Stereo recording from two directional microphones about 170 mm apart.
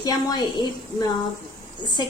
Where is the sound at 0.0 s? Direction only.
25° left (ahead or behind).